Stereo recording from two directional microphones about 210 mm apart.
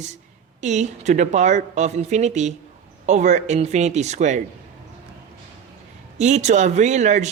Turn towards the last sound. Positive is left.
turn(degrees=-35)  # may be behind; listen again after turning